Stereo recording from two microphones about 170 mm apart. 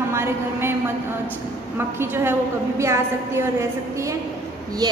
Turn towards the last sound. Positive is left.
turn(degrees=-25)  # may be behind; listen again after turning